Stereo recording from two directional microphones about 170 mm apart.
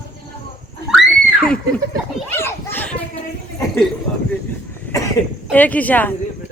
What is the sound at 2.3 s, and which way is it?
Children playing, 15° left (ahead or behind).